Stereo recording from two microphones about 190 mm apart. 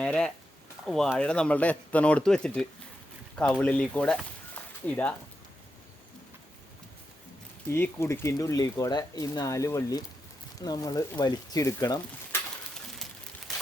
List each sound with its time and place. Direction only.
0.0 s speech: 5° left (ahead or behind)
7.7 s speech: 15° left (ahead or behind)